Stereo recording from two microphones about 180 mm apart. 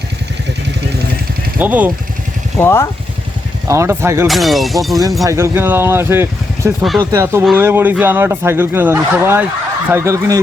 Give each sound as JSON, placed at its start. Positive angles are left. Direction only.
{"t": 1.5, "sound": "speech", "side_deg": -10}
{"t": 2.6, "sound": "speech", "side_deg": 15}
{"t": 3.7, "sound": "speech", "side_deg": -15}
{"t": 4.3, "sound": "speech", "side_deg": 0}
{"t": 5.2, "sound": "speech", "side_deg": -15}